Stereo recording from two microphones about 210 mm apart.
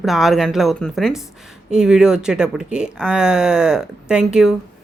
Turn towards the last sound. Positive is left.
turn(degrees=-5)  # may be behind; listen again after turning